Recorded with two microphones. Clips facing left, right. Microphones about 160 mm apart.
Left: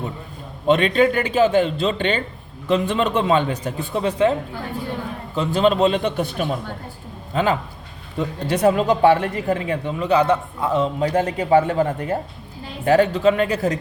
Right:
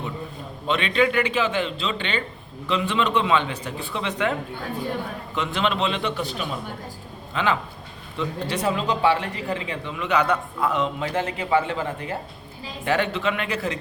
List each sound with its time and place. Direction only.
0.7 s speech: 45° left (ahead or behind)
5.3 s a man's voice: 35° left (ahead or behind)